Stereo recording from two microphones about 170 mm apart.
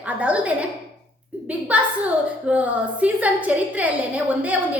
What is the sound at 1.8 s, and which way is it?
A woman's voice, 10° right (ahead or behind).